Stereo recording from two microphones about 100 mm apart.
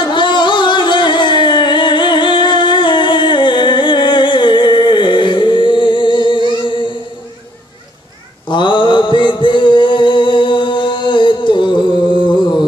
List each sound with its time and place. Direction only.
0.0 s music: 50° left (ahead or behind)
8.5 s mantra: 50° left (ahead or behind)